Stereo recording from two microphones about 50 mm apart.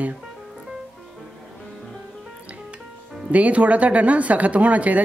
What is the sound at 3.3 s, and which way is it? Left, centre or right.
Speech, right.